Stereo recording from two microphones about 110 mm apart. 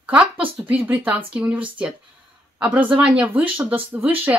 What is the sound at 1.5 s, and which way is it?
Speech, 50° right (ahead or behind).